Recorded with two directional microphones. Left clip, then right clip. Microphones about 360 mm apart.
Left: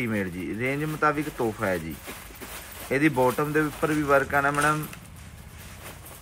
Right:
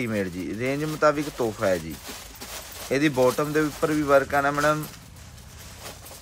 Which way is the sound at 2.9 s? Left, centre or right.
Centre.